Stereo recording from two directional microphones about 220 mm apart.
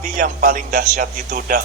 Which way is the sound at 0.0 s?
40° right (ahead or behind).